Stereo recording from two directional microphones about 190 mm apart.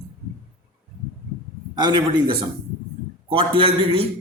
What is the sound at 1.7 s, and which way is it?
A man's voice, 20° right (ahead or behind).